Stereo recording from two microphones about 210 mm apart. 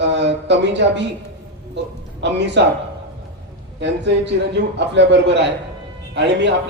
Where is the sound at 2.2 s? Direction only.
55° right (ahead or behind).